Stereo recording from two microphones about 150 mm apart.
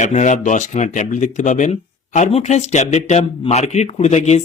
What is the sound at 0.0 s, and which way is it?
Speech, 50° left (ahead or behind).